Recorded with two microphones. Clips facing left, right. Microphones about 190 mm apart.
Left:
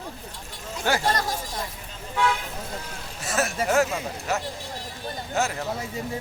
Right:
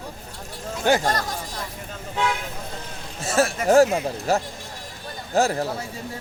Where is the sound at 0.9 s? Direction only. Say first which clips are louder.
Right 5 dB; 20° right (ahead or behind).